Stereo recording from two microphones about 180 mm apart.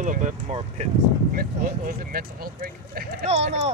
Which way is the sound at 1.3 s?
50° right (ahead or behind).